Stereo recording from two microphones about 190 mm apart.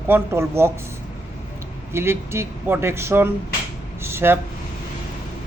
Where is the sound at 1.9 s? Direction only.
15° right (ahead or behind).